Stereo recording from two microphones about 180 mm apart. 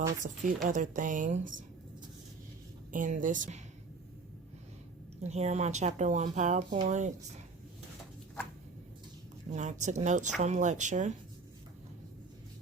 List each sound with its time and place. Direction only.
0.2 s speech: 45° right (ahead or behind)
2.9 s speech: 45° right (ahead or behind)
5.2 s speech: 35° right (ahead or behind)
9.5 s speech: 40° right (ahead or behind)